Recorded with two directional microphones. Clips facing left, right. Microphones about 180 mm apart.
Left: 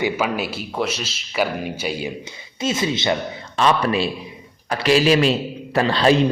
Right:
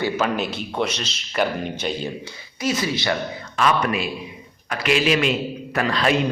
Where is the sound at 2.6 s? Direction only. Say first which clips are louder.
Left 1 dB; 25° left (ahead or behind).